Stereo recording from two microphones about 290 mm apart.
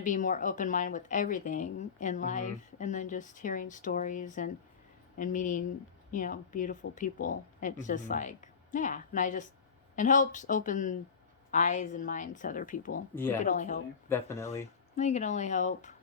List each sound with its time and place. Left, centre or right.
0.0 s speech: left
13.1 s speech: centre
13.4 s speech: left
14.1 s speech: centre
14.9 s speech: left